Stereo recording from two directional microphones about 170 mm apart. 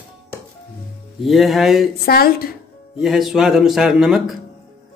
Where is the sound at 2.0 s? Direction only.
60° left (ahead or behind).